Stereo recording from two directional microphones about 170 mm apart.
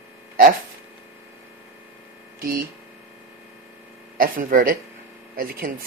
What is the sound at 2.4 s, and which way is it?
Speech, 55° right (ahead or behind).